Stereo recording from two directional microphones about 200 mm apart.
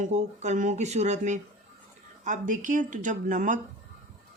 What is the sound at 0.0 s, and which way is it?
Speech, 35° right (ahead or behind).